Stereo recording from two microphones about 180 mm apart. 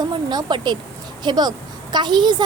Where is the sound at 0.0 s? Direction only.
25° right (ahead or behind).